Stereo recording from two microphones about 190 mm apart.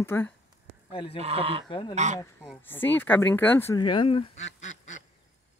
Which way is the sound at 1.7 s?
25° left (ahead or behind).